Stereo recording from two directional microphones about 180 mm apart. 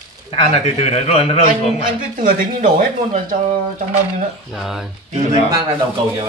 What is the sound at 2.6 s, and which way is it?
Speech, 45° right (ahead or behind).